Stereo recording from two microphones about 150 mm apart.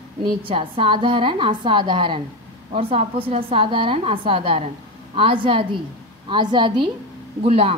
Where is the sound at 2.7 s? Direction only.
45° right (ahead or behind).